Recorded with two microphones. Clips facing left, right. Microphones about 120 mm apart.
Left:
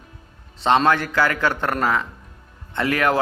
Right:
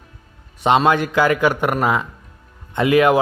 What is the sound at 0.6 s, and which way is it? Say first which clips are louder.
A man's voice: right 2 dB; 15° right (ahead or behind).